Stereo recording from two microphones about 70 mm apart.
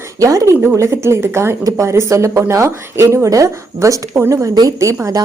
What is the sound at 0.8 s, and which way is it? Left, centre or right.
A woman's voice, right.